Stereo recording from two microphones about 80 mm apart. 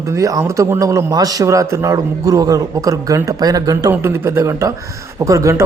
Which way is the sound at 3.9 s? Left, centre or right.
Right.